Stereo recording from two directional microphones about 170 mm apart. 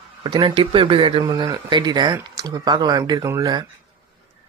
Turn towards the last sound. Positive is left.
turn(degrees=-20)  # may be behind; listen again after turning